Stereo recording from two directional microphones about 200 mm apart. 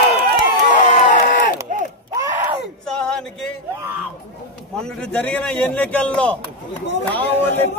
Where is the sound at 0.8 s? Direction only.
40° left (ahead or behind).